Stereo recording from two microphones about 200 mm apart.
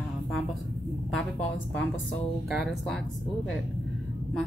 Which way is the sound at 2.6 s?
Centre (ahead or behind).